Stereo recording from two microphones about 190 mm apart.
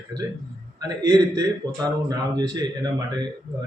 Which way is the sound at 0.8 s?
20° right (ahead or behind).